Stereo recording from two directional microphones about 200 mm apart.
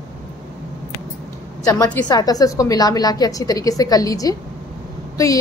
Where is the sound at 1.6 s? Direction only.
15° left (ahead or behind).